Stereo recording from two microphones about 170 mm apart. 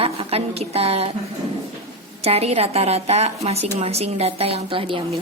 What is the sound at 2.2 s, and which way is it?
A woman's voice, 35° right (ahead or behind).